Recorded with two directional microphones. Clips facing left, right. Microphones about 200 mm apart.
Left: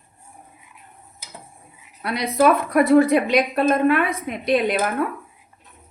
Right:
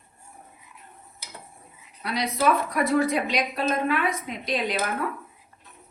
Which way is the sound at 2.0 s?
55° left (ahead or behind).